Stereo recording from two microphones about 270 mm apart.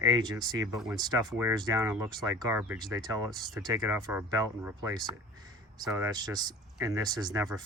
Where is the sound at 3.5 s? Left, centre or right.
Centre.